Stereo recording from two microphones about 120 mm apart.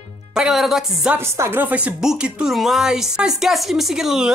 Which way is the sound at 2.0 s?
5° right (ahead or behind).